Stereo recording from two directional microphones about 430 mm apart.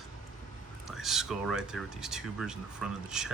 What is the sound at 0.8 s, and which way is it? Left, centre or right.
Speech, centre.